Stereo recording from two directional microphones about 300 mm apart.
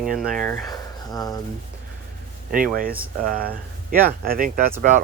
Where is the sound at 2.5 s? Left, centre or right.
Right.